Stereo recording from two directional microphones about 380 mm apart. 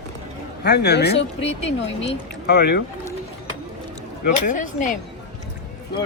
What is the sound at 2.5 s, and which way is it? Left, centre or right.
Speech, left.